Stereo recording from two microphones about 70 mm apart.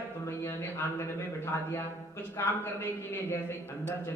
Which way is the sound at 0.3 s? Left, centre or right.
Left.